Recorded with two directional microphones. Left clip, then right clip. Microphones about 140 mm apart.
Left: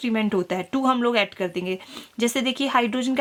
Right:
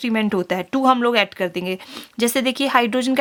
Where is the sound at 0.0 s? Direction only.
45° right (ahead or behind).